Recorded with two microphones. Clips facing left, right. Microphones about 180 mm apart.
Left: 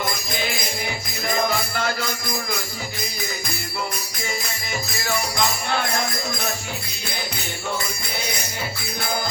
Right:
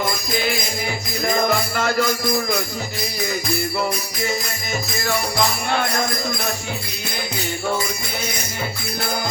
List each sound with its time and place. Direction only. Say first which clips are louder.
1.7 s music: right 5 dB; 50° right (ahead or behind)